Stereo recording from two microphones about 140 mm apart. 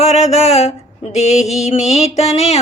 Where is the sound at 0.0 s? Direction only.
50° left (ahead or behind).